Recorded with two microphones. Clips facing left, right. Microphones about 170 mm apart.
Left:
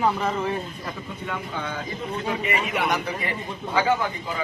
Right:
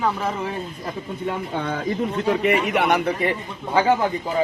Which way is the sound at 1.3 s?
40° right (ahead or behind).